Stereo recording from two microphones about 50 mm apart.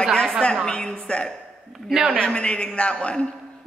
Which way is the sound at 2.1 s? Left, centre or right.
Centre.